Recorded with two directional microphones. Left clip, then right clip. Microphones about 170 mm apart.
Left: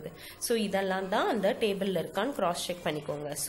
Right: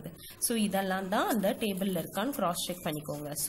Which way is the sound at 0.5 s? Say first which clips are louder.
Left 2 dB; 25° right (ahead or behind).